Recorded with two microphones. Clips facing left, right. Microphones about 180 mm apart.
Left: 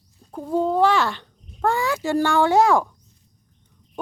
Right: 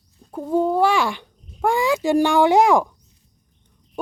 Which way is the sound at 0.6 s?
10° right (ahead or behind).